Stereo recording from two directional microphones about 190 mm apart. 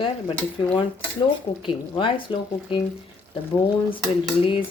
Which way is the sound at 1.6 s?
25° left (ahead or behind).